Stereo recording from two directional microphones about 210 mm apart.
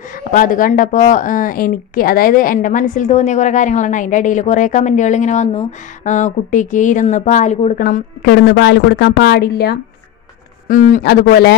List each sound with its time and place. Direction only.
0.3 s a man's voice: 40° left (ahead or behind)